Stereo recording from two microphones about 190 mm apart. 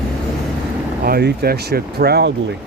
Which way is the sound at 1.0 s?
55° right (ahead or behind).